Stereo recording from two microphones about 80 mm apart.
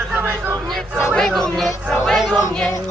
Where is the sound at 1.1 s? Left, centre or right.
Centre.